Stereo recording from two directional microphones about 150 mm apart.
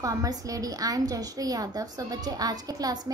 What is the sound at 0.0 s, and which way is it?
A woman's voice, 25° right (ahead or behind).